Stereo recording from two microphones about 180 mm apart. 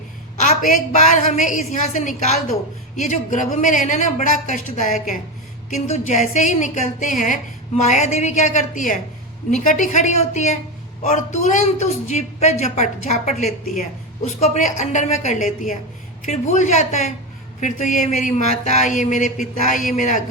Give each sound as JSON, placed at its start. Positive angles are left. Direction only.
{"t": 1.1, "sound": "a man's voice", "side_deg": 45}